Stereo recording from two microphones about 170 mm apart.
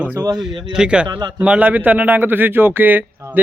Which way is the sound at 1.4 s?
10° right (ahead or behind).